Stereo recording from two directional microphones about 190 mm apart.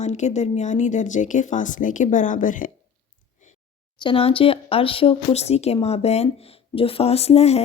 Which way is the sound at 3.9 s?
25° left (ahead or behind).